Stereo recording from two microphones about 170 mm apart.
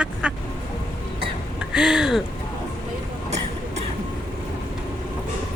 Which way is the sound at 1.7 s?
5° right (ahead or behind).